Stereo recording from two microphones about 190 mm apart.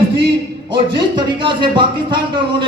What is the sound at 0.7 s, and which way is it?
A man's voice, 25° right (ahead or behind).